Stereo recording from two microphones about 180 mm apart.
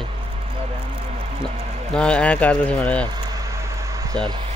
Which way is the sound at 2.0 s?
5° left (ahead or behind).